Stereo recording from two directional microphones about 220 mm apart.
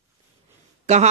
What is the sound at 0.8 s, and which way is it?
Speech, 30° right (ahead or behind).